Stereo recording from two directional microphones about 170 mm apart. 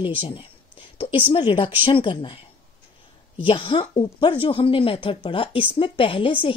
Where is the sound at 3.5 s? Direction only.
30° left (ahead or behind).